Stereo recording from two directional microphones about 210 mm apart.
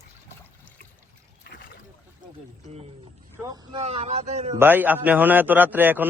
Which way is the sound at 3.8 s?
30° right (ahead or behind).